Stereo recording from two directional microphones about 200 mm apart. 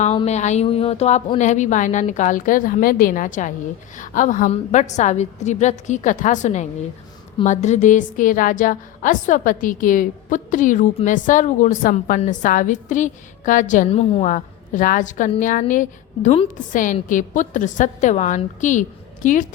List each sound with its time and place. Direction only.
0.0 s a woman's voice: 30° left (ahead or behind)